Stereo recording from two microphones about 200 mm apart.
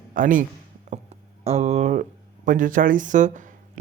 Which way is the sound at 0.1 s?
40° right (ahead or behind).